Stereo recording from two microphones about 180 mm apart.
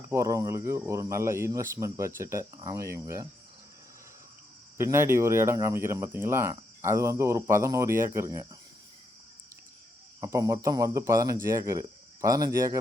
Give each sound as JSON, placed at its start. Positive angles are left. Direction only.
{"t": 0.1, "sound": "speech", "side_deg": -15}
{"t": 4.8, "sound": "speech", "side_deg": -15}
{"t": 10.2, "sound": "speech", "side_deg": -20}